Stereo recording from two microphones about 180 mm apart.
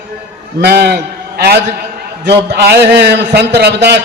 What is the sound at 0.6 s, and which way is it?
A man's voice, 70° right (ahead or behind).